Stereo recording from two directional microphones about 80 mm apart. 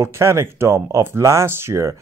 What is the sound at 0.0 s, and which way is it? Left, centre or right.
Speech, right.